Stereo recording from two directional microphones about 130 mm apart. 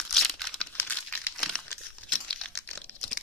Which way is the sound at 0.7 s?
15° left (ahead or behind).